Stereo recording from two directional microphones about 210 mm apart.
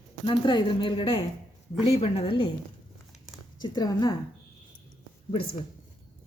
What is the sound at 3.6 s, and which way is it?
Speech, 20° left (ahead or behind).